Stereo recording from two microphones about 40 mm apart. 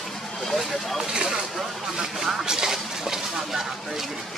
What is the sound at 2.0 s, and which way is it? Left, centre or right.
Speech, centre.